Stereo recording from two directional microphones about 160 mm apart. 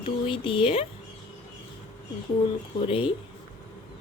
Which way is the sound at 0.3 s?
35° left (ahead or behind).